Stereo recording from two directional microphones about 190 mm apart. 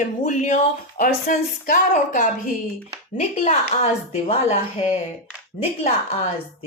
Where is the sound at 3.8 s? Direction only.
35° left (ahead or behind).